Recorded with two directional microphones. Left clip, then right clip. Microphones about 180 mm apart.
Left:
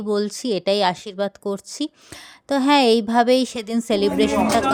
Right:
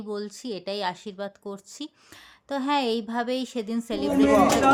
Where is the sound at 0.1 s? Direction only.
40° left (ahead or behind).